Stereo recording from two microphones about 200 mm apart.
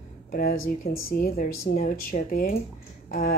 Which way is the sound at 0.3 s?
45° left (ahead or behind).